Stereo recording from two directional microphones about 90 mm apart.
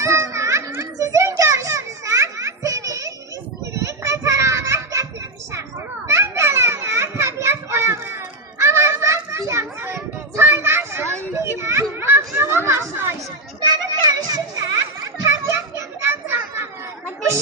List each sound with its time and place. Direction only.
0.0 s children playing: 30° right (ahead or behind)
6.1 s children playing: 30° right (ahead or behind)
14.3 s children playing: 45° right (ahead or behind)
16.0 s children playing: 25° right (ahead or behind)